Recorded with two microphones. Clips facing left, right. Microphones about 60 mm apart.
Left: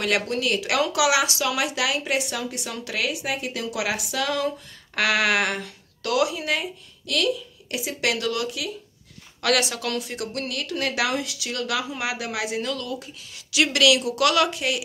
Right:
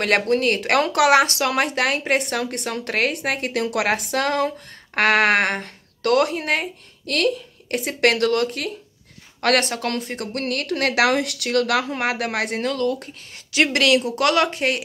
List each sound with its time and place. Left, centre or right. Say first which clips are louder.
0.0 s a woman's voice: right 5 dB; right